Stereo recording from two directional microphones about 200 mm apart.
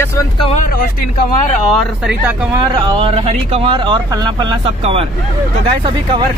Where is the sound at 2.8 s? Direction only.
25° right (ahead or behind).